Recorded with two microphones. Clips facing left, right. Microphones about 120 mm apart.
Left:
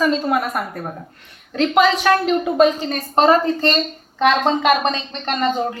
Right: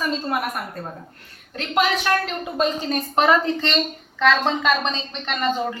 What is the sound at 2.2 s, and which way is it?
Speech, 10° left (ahead or behind).